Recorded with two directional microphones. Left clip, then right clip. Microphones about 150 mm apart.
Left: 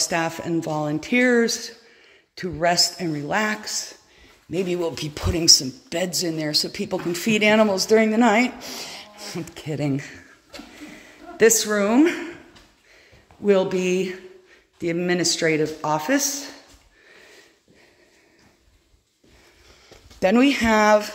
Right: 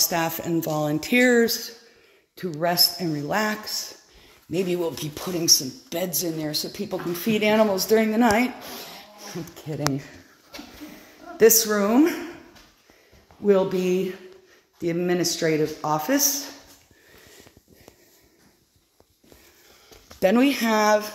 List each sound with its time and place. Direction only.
0.0 s speech: 5° left (ahead or behind)
4.8 s speech: 10° left (ahead or behind)
9.3 s speech: 25° left (ahead or behind)
11.0 s speech: 5° left (ahead or behind)
13.4 s speech: 5° left (ahead or behind)
20.2 s speech: centre (ahead or behind)